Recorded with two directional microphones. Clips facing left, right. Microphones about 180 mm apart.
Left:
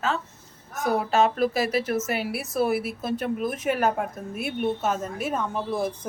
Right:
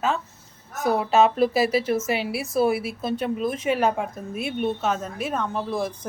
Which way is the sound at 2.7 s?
Centre (ahead or behind).